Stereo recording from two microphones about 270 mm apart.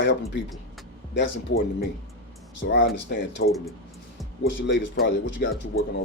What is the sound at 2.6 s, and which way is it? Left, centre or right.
Speech, left.